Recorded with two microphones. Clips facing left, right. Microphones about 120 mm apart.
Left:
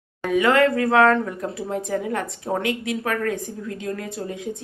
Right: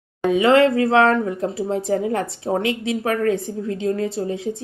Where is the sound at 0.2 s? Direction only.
25° right (ahead or behind).